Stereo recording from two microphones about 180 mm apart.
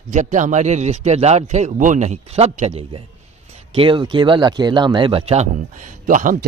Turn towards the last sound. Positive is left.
turn(degrees=-45)  # may be behind; listen again after turning